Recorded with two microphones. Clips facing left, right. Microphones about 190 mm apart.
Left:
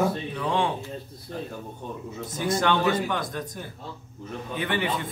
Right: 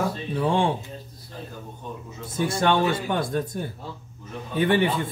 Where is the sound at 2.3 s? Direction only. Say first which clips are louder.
Right 2 dB; 30° right (ahead or behind).